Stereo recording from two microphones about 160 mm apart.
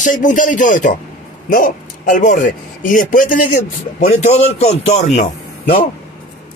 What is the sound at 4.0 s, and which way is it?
A man's voice, 45° left (ahead or behind).